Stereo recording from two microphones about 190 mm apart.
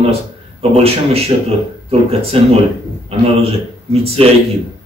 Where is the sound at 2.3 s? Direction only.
30° right (ahead or behind).